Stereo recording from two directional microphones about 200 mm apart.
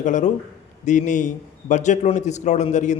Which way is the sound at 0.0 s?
40° left (ahead or behind).